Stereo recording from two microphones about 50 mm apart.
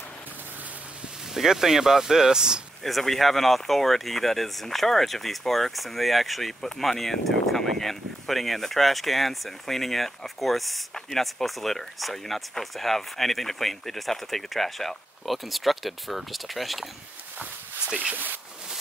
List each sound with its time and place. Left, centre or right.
1.3 s speech: centre
2.8 s speech: centre
18.1 s speech: right